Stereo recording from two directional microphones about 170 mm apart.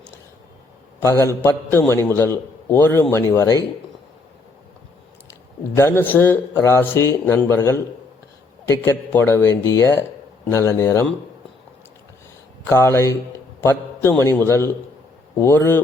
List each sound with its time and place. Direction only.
0.9 s a man's voice: 15° left (ahead or behind)
5.3 s a man's voice: 15° left (ahead or behind)
12.6 s a man's voice: 15° left (ahead or behind)